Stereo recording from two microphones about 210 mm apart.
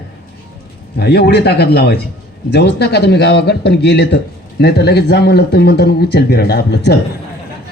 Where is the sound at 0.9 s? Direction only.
50° left (ahead or behind).